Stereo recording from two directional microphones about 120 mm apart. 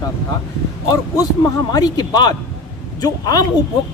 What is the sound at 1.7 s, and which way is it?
Speech, 35° left (ahead or behind).